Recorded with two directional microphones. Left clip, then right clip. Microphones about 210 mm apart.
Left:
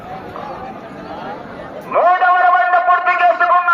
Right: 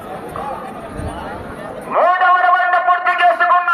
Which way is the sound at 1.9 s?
40° right (ahead or behind).